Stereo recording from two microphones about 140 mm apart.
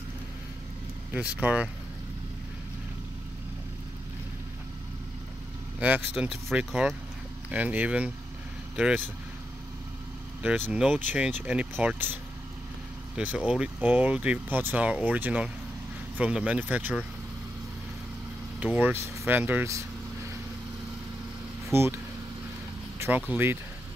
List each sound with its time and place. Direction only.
1.1 s speech: 10° right (ahead or behind)
5.8 s speech: 10° right (ahead or behind)
10.7 s speech: 5° right (ahead or behind)
18.6 s speech: 10° right (ahead or behind)
21.7 s speech: 15° right (ahead or behind)
22.9 s speech: 15° right (ahead or behind)